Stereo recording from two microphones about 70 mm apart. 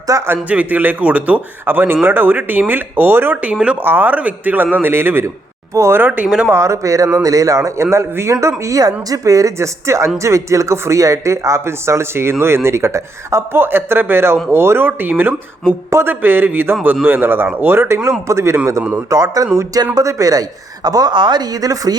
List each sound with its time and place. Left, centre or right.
0.1 s speech: right
0.4 s speech: right
3.4 s speech: centre
3.8 s speech: right
5.7 s speech: right
6.2 s speech: centre
6.5 s speech: right
18.8 s speech: centre
19.1 s speech: right